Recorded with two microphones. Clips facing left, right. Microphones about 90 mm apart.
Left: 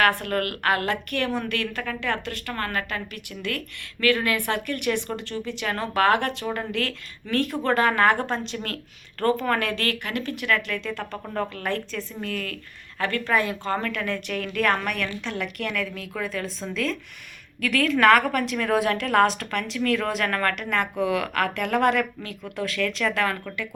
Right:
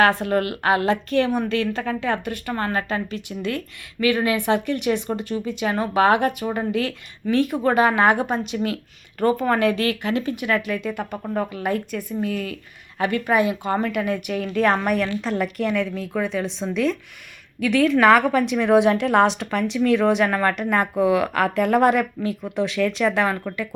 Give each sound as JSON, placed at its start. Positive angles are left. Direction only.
{"t": 0.0, "sound": "a woman's voice", "side_deg": -20}